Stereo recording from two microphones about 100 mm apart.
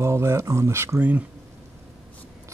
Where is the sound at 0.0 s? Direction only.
30° right (ahead or behind).